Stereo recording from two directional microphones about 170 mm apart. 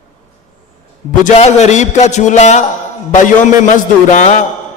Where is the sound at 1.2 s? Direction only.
40° left (ahead or behind).